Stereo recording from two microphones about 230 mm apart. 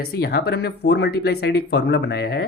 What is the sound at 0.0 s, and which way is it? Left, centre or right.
Speech, left.